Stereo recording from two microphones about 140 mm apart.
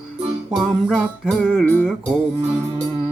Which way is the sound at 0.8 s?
5° left (ahead or behind).